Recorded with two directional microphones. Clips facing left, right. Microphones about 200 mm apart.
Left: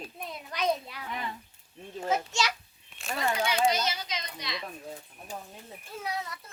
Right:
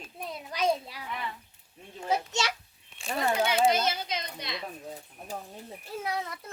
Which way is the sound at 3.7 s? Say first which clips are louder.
Right 3 dB; 55° right (ahead or behind).